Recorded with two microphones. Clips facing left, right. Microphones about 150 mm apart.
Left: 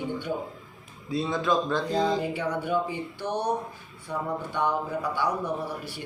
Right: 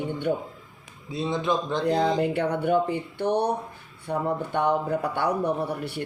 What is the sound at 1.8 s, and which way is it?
A man's voice, 65° right (ahead or behind).